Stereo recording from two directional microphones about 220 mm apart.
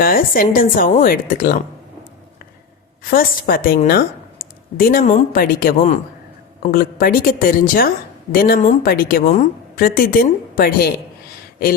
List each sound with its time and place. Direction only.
0.0 s a woman's voice: 40° left (ahead or behind)
3.0 s a woman's voice: 40° left (ahead or behind)